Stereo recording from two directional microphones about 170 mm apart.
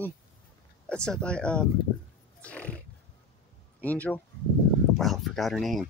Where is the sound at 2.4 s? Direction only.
10° left (ahead or behind).